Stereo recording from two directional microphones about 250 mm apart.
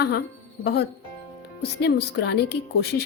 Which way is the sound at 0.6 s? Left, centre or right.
Left.